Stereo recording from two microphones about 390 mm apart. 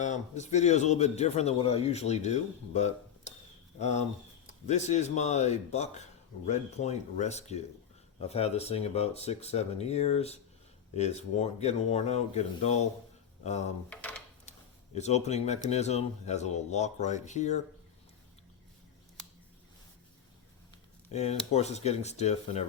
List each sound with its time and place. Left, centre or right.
0.0 s a man's voice: centre
13.9 s speech: centre
14.9 s a man's voice: centre
21.1 s a man's voice: centre